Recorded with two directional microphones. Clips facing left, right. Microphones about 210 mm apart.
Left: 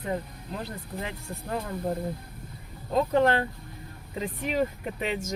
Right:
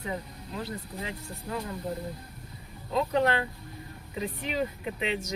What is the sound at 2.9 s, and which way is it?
Speech, 45° left (ahead or behind).